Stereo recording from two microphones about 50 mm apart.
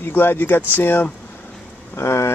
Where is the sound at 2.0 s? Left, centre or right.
Left.